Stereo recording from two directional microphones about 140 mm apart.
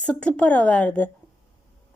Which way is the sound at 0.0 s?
10° left (ahead or behind).